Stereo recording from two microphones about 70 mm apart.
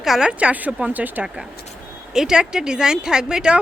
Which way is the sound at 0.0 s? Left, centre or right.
Centre.